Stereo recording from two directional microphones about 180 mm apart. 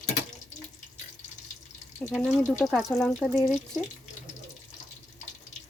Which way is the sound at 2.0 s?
Centre (ahead or behind).